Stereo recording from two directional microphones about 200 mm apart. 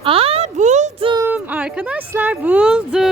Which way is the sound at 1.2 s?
10° right (ahead or behind).